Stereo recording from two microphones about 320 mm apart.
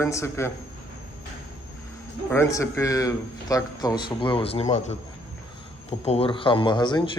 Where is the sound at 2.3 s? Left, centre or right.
Centre.